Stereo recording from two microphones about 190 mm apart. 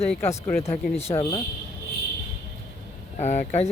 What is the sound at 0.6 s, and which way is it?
Speech, 35° left (ahead or behind).